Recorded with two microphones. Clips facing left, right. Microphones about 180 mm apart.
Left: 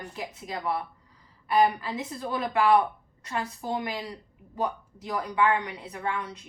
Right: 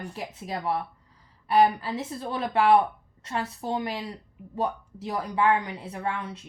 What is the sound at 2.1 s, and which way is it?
A woman's voice, 25° right (ahead or behind).